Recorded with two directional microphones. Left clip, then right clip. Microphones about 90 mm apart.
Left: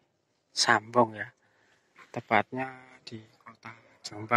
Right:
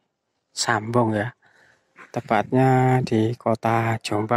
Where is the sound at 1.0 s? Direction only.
30° right (ahead or behind).